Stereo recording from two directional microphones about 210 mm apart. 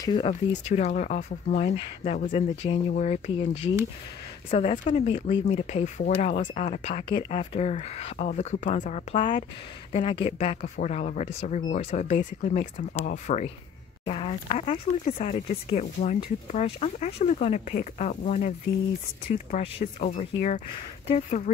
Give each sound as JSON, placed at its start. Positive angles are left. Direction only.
{"t": 0.0, "sound": "speech", "side_deg": 20}
{"t": 0.7, "sound": "speech", "side_deg": 35}